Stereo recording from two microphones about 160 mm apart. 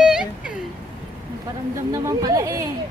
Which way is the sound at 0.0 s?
5° right (ahead or behind).